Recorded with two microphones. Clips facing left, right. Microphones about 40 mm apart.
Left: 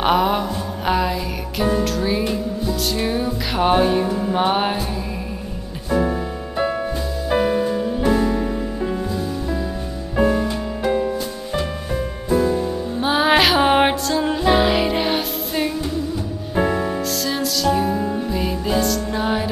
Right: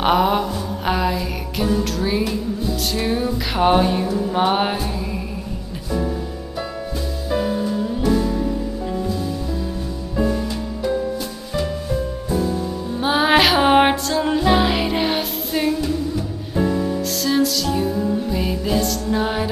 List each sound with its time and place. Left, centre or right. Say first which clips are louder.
0.0 s music: right 1 dB; centre
5.9 s music: left 4 dB; left
7.2 s music: left 3 dB; left
8.8 s music: left 1 dB; left
13.0 s music: even; centre
16.5 s music: left 1 dB; left
17.1 s music: right 3 dB; centre
17.8 s music: even; left
18.3 s music: even; centre